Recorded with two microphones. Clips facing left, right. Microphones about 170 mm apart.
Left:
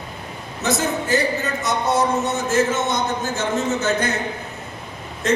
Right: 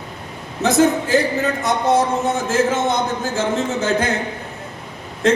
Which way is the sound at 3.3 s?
90° right.